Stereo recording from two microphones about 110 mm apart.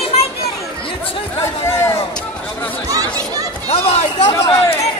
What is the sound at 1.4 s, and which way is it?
Speech, 25° left (ahead or behind).